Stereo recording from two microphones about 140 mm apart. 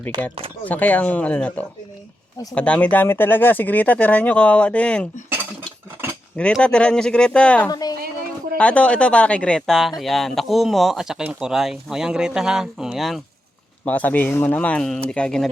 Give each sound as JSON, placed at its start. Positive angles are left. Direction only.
{"t": 0.6, "sound": "speech", "side_deg": 10}
{"t": 6.3, "sound": "speech", "side_deg": 10}
{"t": 7.7, "sound": "a sound", "side_deg": 30}
{"t": 8.5, "sound": "speech", "side_deg": 10}
{"t": 13.8, "sound": "speech", "side_deg": 10}